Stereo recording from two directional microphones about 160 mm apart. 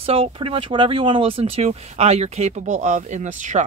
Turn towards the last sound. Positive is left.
turn(degrees=-50)  # may be behind; listen again after turning